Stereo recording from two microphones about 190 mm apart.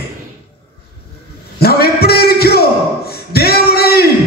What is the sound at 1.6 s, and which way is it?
Music, 55° left (ahead or behind).